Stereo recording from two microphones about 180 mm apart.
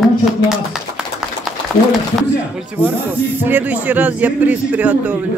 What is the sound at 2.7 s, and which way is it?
Speech, 10° right (ahead or behind).